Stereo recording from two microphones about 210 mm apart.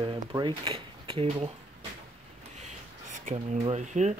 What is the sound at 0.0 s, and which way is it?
Speech, 20° right (ahead or behind).